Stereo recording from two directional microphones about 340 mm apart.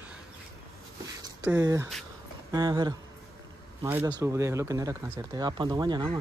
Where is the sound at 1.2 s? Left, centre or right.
Centre.